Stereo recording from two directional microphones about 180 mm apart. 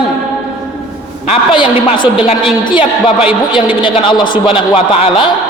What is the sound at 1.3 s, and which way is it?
A man's voice, 30° left (ahead or behind).